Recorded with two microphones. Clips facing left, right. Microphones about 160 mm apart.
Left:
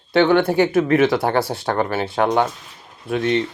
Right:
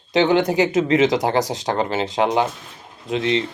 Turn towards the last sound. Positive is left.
turn(degrees=-20)  # may be behind; listen again after turning